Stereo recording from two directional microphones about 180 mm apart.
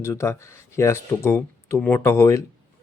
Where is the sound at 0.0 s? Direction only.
15° left (ahead or behind).